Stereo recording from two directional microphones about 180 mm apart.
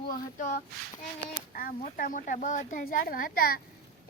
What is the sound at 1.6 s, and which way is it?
Speech, 55° left (ahead or behind).